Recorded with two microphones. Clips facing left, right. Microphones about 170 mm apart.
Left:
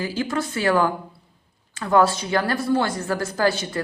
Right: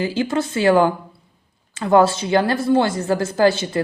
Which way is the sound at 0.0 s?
25° right (ahead or behind).